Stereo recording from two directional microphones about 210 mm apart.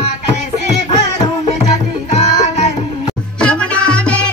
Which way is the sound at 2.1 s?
30° left (ahead or behind).